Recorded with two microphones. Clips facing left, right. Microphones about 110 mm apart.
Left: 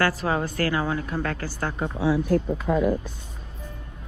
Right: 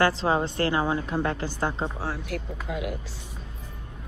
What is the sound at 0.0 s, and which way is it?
A woman's voice, 25° right (ahead or behind).